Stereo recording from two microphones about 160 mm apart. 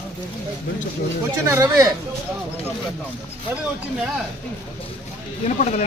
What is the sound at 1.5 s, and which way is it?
Speech, 20° right (ahead or behind).